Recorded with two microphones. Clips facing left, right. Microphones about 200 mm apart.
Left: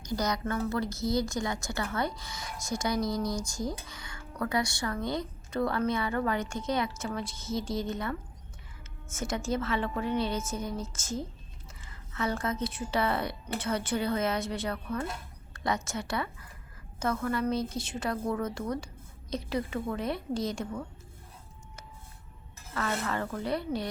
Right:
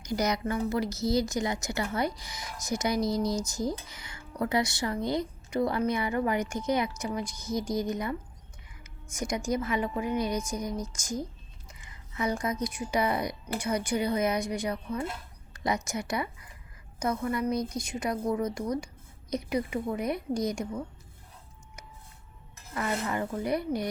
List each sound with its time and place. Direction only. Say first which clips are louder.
0.0 s a woman's voice: right 2 dB; 20° right (ahead or behind)
12.1 s a woman's voice: right 1 dB; 15° right (ahead or behind)
17.5 s a woman's voice: right 1 dB; 25° left (ahead or behind)
18.0 s speech: right 2 dB; 15° right (ahead or behind)
22.7 s speech: right 1 dB; 15° right (ahead or behind)